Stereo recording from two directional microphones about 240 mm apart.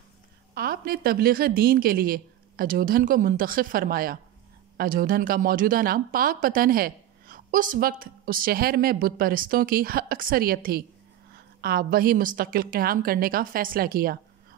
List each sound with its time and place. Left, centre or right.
0.6 s a woman's voice: right